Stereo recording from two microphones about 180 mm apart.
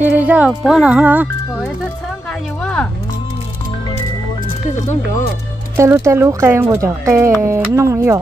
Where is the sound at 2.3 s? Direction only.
5° left (ahead or behind).